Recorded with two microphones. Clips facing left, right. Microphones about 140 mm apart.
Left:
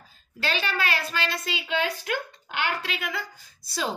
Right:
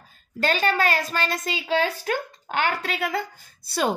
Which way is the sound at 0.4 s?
45° right (ahead or behind).